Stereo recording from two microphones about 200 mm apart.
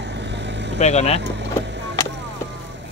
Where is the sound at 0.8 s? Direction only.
35° left (ahead or behind).